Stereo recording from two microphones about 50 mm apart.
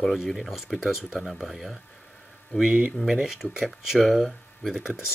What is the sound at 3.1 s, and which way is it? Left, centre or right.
Speech, centre.